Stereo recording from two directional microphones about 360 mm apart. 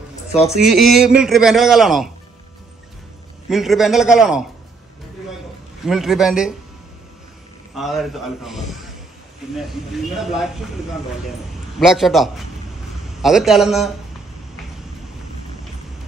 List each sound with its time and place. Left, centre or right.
0.1 s a sound: centre
0.7 s a man's voice: centre
3.4 s a man's voice: centre
5.9 s a man's voice: centre
7.7 s a man's voice: centre
11.8 s a man's voice: centre